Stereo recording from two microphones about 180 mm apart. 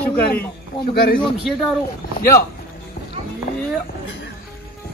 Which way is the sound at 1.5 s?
Centre (ahead or behind).